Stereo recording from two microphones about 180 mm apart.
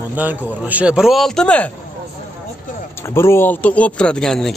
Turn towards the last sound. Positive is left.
turn(degrees=5)  # may be behind; listen again after turning